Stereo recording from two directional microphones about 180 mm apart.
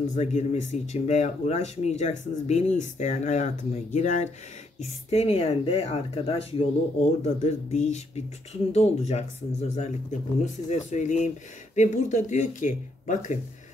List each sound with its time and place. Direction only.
0.1 s speech: 40° left (ahead or behind)